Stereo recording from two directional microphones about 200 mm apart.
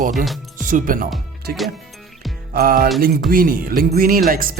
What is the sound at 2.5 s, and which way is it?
Speech, 45° right (ahead or behind).